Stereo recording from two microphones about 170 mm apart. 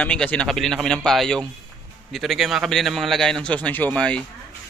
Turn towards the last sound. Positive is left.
turn(degrees=5)  # may be behind; listen again after turning